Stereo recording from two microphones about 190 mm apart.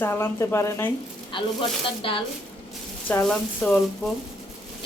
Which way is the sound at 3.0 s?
5° left (ahead or behind).